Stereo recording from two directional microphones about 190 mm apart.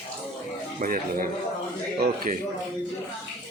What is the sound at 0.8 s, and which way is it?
Speech, 45° right (ahead or behind).